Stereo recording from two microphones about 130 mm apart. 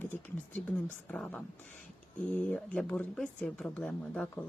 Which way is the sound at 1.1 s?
5° left (ahead or behind).